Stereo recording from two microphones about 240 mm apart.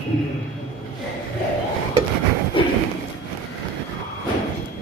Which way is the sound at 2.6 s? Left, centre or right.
Left.